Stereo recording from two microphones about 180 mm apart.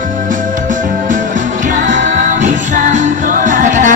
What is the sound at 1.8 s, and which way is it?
Music, 45° right (ahead or behind).